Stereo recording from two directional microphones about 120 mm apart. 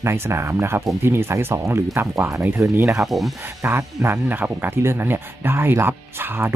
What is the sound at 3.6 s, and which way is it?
Speech, 25° right (ahead or behind).